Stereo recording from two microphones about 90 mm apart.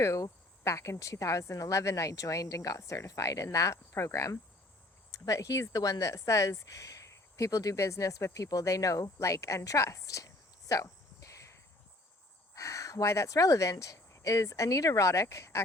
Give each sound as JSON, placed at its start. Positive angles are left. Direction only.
{"t": 0.0, "sound": "speech", "side_deg": 35}
{"t": 12.5, "sound": "speech", "side_deg": 35}